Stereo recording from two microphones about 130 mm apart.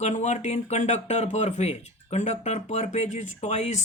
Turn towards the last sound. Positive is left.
turn(degrees=60)  # may be behind; listen again after turning